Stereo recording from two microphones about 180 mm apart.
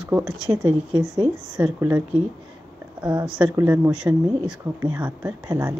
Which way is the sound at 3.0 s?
5° right (ahead or behind).